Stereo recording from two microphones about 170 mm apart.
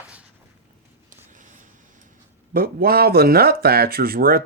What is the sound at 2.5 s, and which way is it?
Speech, 60° right (ahead or behind).